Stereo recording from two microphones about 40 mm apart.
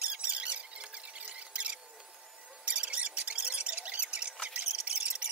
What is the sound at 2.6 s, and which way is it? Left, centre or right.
Mouse, right.